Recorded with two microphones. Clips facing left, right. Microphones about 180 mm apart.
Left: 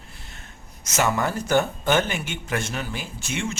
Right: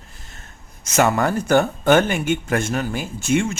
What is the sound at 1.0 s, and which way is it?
Speech, 60° right (ahead or behind).